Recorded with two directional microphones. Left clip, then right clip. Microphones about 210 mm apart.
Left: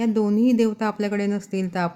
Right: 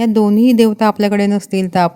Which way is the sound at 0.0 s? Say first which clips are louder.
Right 8 dB; 40° right (ahead or behind).